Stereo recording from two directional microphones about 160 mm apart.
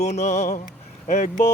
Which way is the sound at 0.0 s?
45° left (ahead or behind).